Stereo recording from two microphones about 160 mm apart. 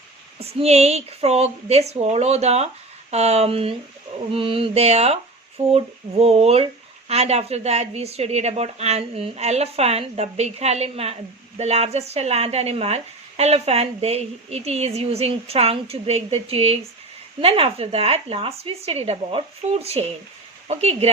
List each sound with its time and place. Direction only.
0.3 s speech: 40° right (ahead or behind)